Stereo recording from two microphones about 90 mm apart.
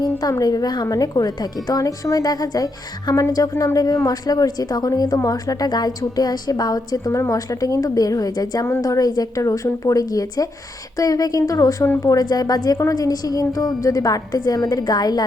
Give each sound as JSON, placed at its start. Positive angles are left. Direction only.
{"t": 0.0, "sound": "a woman's voice", "side_deg": 45}